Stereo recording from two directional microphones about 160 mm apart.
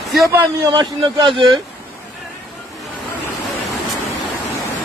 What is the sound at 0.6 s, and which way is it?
Speech, 25° right (ahead or behind).